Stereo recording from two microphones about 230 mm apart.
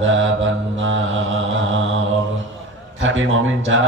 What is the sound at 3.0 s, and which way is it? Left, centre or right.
Mantra, right.